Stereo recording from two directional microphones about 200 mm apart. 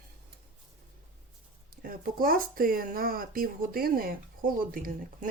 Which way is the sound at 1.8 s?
45° right (ahead or behind).